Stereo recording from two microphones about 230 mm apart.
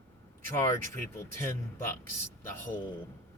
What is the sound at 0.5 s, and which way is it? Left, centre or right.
Speech, centre.